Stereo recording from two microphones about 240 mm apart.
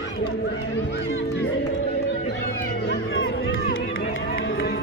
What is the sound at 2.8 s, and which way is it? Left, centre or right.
Run, left.